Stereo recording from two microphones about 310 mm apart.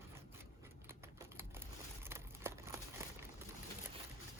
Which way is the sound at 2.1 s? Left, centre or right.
Centre.